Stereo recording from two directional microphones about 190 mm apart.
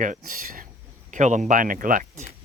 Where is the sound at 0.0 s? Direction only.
45° right (ahead or behind).